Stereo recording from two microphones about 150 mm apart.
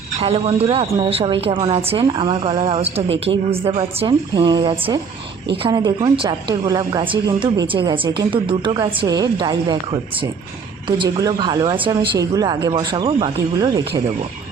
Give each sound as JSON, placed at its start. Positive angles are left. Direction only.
{"t": 0.2, "sound": "a woman's voice", "side_deg": -40}